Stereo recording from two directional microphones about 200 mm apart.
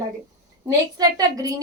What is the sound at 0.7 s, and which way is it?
Speech, 20° right (ahead or behind).